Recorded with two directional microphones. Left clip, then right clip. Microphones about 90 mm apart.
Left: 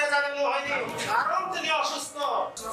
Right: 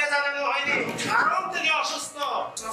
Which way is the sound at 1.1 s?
Centre (ahead or behind).